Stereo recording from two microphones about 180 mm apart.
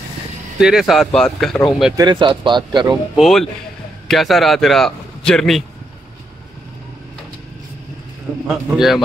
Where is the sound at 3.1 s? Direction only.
Centre (ahead or behind).